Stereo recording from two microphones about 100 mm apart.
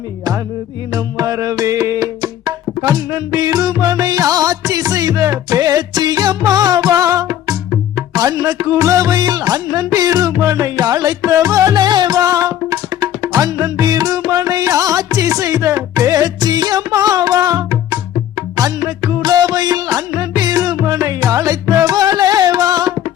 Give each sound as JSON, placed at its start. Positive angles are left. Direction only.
{"t": 0.9, "sound": "music", "side_deg": -35}